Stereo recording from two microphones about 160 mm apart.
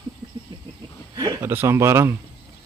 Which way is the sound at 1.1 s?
25° right (ahead or behind).